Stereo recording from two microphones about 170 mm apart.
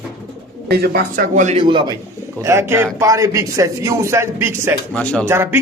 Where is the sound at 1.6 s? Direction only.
25° right (ahead or behind).